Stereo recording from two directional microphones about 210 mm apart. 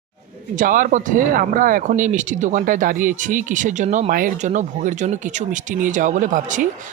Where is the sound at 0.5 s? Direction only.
40° right (ahead or behind).